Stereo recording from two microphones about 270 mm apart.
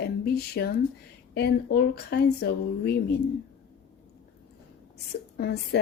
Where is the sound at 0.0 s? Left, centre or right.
Left.